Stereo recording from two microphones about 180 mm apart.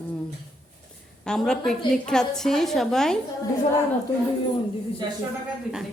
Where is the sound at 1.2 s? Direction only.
5° left (ahead or behind).